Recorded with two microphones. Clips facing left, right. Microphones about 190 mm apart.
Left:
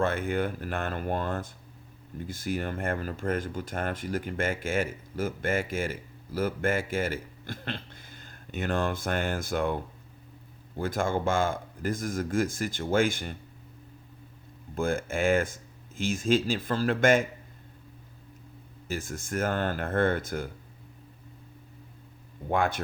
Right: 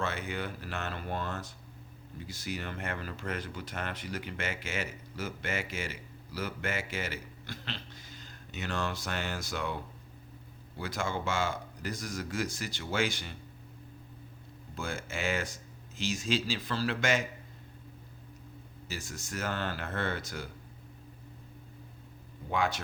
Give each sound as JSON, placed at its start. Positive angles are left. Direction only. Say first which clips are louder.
{"t": 0.0, "sound": "speech", "louder": "left 8 dB", "side_deg": 50}
{"t": 14.8, "sound": "speech", "louder": "left 9 dB", "side_deg": 50}
{"t": 18.9, "sound": "speech", "louder": "left 7 dB", "side_deg": 55}
{"t": 22.4, "sound": "speech", "louder": "left 4 dB", "side_deg": 55}